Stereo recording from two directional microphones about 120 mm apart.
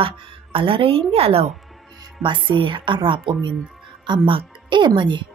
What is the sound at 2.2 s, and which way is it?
A woman's voice, 45° right (ahead or behind).